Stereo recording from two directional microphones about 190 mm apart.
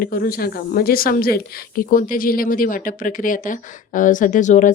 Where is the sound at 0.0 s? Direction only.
50° left (ahead or behind).